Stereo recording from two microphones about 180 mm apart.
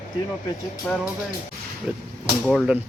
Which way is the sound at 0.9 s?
5° left (ahead or behind).